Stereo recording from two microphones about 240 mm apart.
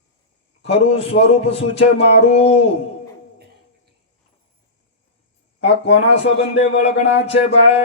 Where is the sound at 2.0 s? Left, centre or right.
Left.